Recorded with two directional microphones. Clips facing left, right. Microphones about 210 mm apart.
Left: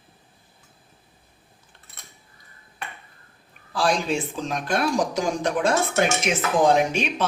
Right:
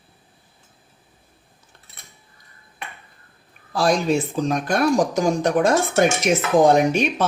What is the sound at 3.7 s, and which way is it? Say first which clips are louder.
Speech: right 4 dB; 40° right (ahead or behind).